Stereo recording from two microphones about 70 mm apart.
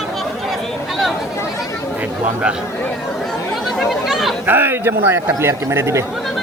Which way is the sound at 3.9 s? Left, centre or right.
Centre.